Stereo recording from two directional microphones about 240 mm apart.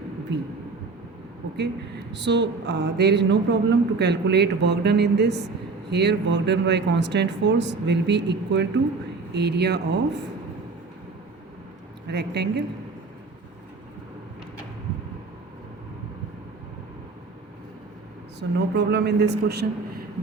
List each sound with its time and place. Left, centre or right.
2.1 s speech: right
12.0 s speech: right
18.3 s speech: right